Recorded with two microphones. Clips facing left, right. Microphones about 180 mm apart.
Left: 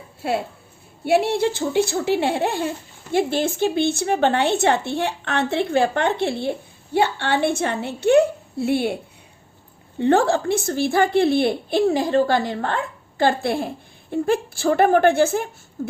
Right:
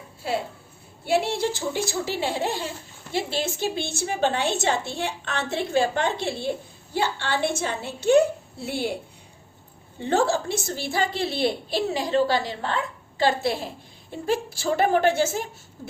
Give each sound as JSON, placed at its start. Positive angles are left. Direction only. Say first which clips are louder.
{"t": 0.2, "sound": "speech", "louder": "left 4 dB", "side_deg": 60}
{"t": 10.0, "sound": "speech", "louder": "left 5 dB", "side_deg": 60}
{"t": 15.8, "sound": "a sound", "louder": "left 10 dB", "side_deg": 50}